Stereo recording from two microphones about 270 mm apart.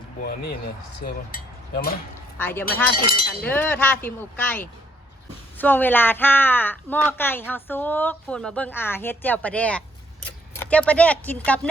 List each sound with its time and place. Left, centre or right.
1.0 s speech: left
2.4 s a woman's voice: centre